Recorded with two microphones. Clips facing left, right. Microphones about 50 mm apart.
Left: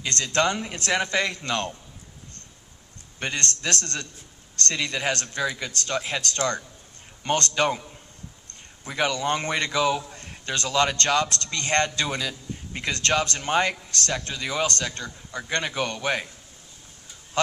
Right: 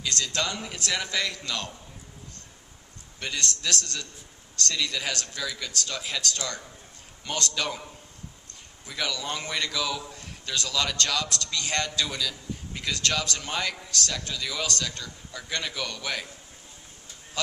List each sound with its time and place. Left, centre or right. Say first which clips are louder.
0.0 s a man's voice: left 6 dB; left
3.2 s a man's voice: left 3 dB; left
8.8 s a man's voice: left 7 dB; left
17.4 s a man's voice: left 8 dB; left